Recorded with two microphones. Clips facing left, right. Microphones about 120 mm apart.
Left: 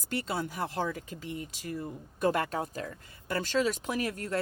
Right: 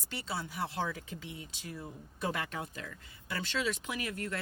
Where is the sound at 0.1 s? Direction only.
50° left (ahead or behind).